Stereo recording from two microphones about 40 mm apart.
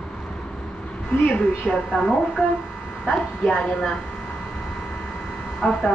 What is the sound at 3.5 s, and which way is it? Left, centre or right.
Speech, left.